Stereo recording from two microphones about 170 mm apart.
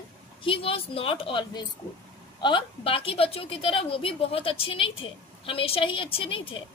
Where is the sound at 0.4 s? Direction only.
30° left (ahead or behind).